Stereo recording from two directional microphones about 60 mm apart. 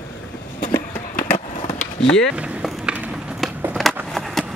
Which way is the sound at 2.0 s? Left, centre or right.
Centre.